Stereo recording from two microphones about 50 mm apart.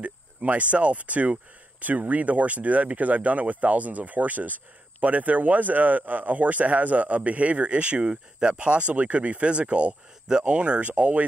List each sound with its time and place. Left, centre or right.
0.0 s speech: right